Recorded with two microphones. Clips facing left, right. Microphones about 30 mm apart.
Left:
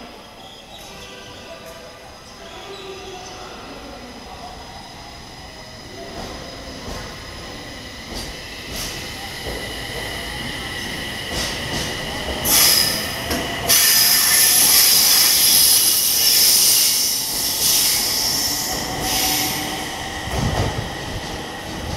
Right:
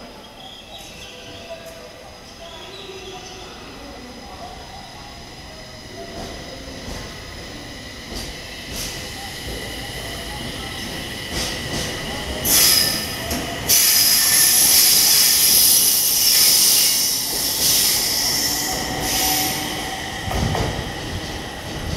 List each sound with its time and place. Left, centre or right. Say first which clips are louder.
8.1 s train: left 1 dB; centre
14.5 s train: left 1 dB; left
14.8 s hiss: even; centre
15.8 s jet engine: left 1 dB; centre
16.3 s vehicle: right 1 dB; centre